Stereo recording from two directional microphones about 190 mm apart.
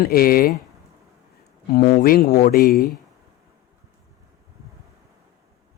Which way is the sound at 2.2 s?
35° left (ahead or behind).